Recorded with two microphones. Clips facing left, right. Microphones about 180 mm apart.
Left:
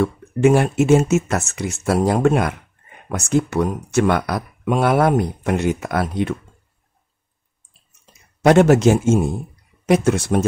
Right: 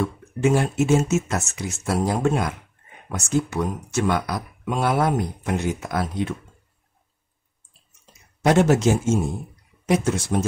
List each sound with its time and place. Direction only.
0.0 s speech: 65° left (ahead or behind)
8.5 s speech: 65° left (ahead or behind)